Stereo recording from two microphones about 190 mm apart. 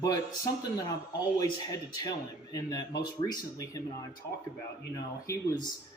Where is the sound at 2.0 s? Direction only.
20° left (ahead or behind).